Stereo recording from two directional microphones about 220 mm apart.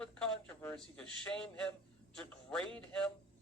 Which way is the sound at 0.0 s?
5° left (ahead or behind).